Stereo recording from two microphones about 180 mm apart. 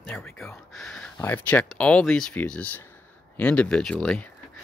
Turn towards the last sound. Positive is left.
turn(degrees=5)  # may be behind; listen again after turning